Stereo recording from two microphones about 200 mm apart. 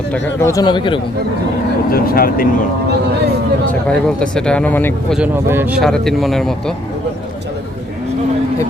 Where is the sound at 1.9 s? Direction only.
50° left (ahead or behind).